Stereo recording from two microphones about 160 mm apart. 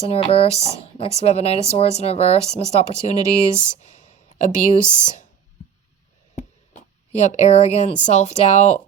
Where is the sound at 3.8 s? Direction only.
45° left (ahead or behind).